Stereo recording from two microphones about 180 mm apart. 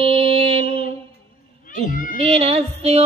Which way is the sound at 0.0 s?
30° right (ahead or behind).